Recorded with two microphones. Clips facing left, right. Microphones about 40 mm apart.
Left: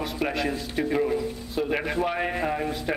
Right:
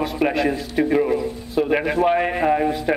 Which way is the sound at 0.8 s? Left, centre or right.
Centre.